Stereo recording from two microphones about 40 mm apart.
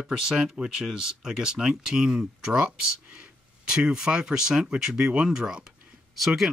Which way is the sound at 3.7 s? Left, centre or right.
Centre.